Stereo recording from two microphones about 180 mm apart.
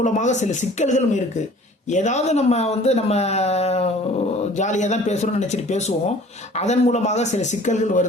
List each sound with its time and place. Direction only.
0.0 s speech: 40° left (ahead or behind)